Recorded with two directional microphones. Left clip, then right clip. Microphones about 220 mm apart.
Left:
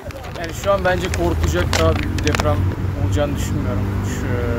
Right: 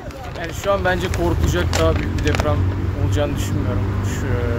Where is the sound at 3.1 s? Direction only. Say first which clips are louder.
Left 1 dB; centre (ahead or behind).